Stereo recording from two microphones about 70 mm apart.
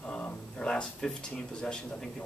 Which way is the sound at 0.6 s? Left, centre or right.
Centre.